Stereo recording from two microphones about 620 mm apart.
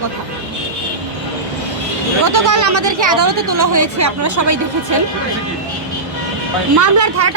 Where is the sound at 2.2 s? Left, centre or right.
Right.